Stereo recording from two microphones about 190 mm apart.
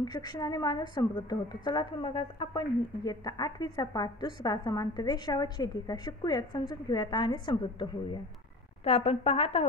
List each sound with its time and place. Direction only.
0.0 s a woman's voice: 20° left (ahead or behind)